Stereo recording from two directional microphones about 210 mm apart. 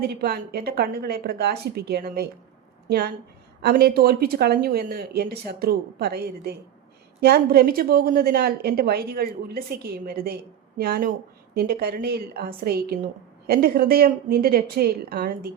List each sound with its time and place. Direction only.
0.0 s a woman's voice: 50° right (ahead or behind)
3.6 s a woman's voice: 45° right (ahead or behind)